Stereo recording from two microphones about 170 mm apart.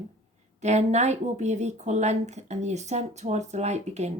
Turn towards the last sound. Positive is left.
turn(degrees=-40)  # may be behind; listen again after turning